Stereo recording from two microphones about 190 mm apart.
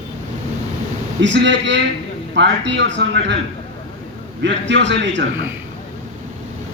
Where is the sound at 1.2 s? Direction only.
70° right (ahead or behind).